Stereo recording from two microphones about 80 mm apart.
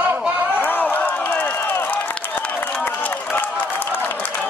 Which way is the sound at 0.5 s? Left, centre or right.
Left.